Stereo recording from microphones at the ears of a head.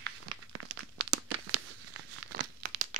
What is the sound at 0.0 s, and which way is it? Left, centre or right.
Crumpling, right.